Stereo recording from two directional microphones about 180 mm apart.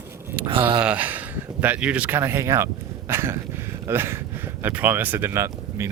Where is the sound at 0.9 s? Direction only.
10° right (ahead or behind).